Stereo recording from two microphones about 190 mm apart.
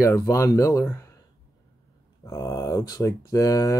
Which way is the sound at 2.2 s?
15° left (ahead or behind).